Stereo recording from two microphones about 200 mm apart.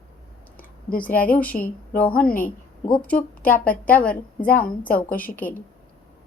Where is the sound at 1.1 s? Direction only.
45° left (ahead or behind).